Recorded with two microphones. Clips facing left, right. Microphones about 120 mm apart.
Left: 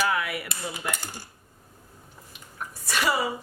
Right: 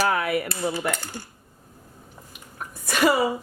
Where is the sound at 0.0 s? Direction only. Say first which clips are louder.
Right 4 dB; 40° right (ahead or behind).